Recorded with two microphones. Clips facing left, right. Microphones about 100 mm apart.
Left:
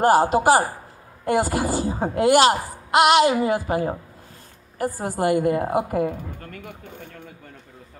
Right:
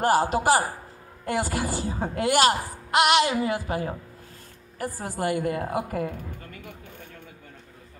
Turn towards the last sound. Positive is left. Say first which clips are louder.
# left 6 dB
turn(degrees=35)  # may be behind; listen again after turning